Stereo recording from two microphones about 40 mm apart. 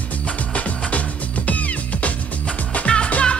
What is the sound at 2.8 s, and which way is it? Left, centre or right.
Music, left.